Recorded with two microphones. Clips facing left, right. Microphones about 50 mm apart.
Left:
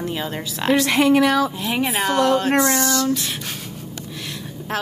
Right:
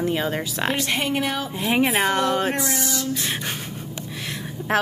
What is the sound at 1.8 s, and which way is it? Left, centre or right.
Speech, centre.